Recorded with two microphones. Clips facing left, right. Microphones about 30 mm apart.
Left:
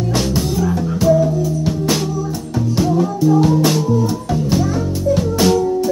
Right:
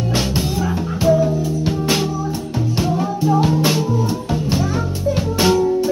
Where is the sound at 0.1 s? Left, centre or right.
Right.